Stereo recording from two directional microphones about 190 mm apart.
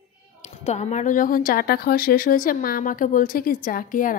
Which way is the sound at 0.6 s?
35° left (ahead or behind).